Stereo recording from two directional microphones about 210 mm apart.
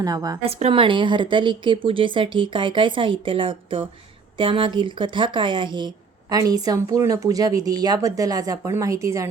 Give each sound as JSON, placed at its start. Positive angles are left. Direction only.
{"t": 0.0, "sound": "a woman's voice", "side_deg": -20}